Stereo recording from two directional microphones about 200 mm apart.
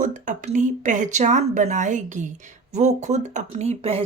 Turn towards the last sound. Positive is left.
turn(degrees=-30)  # may be behind; listen again after turning